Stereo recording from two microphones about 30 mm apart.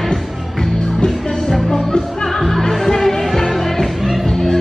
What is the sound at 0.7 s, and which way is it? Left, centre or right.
Music, left.